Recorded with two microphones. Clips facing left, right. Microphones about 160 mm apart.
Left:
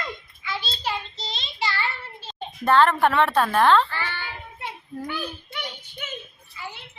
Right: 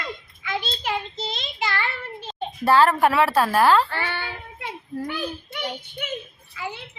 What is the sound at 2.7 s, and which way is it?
A woman's voice, 5° right (ahead or behind).